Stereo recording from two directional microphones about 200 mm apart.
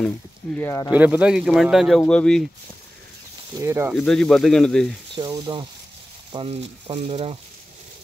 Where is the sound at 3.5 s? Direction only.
15° right (ahead or behind).